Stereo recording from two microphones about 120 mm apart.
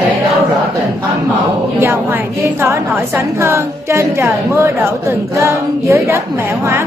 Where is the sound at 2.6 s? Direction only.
20° right (ahead or behind).